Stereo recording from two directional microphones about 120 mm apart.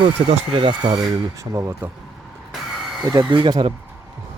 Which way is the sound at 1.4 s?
25° right (ahead or behind).